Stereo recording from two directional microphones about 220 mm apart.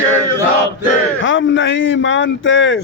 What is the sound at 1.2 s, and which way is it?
Speech, 60° left (ahead or behind).